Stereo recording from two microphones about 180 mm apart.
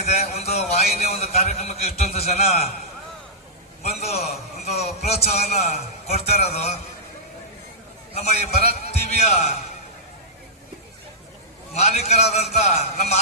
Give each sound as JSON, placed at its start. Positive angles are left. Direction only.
{"t": 0.1, "sound": "a man's voice", "side_deg": 35}
{"t": 4.2, "sound": "a man's voice", "side_deg": 35}
{"t": 8.1, "sound": "a man's voice", "side_deg": 35}
{"t": 11.7, "sound": "a man's voice", "side_deg": 35}